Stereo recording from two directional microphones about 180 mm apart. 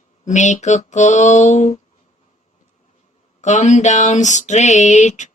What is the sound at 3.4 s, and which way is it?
Female singing, 40° left (ahead or behind).